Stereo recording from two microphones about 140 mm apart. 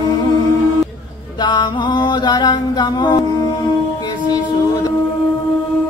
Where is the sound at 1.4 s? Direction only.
35° left (ahead or behind).